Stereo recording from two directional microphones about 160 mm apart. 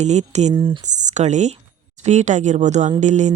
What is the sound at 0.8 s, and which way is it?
Speech, 50° right (ahead or behind).